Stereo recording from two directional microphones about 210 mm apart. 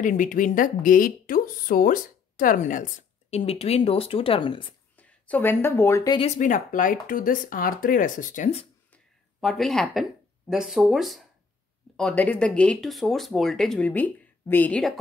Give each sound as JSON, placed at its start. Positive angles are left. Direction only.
{"t": 0.0, "sound": "a woman's voice", "side_deg": 40}
{"t": 4.9, "sound": "speech", "side_deg": 10}
{"t": 6.1, "sound": "a woman's voice", "side_deg": 35}
{"t": 8.9, "sound": "a sound", "side_deg": 0}
{"t": 10.5, "sound": "speech", "side_deg": 0}